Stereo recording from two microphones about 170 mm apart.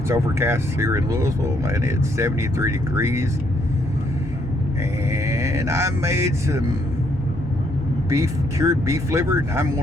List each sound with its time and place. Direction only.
0.1 s speech: 15° right (ahead or behind)
5.1 s speech: 15° right (ahead or behind)
8.1 s speech: 20° right (ahead or behind)